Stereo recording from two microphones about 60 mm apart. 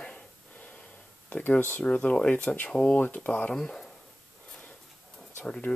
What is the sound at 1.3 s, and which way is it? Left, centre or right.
Speech, left.